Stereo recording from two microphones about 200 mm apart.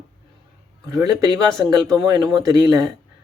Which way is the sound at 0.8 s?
15° right (ahead or behind).